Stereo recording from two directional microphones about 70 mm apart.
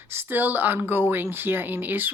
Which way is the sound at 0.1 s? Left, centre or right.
Right.